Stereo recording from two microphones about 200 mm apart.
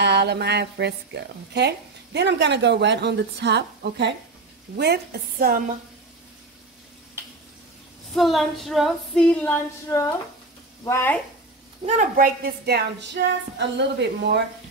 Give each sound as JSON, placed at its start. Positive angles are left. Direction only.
{"t": 0.0, "sound": "a woman's voice", "side_deg": -55}
{"t": 8.1, "sound": "female singing", "side_deg": 0}
{"t": 10.9, "sound": "speech", "side_deg": 10}
{"t": 11.8, "sound": "a woman's voice", "side_deg": -35}
{"t": 12.6, "sound": "a woman's voice", "side_deg": -55}